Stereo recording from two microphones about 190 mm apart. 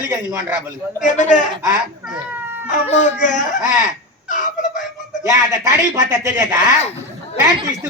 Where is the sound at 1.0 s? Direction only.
40° left (ahead or behind).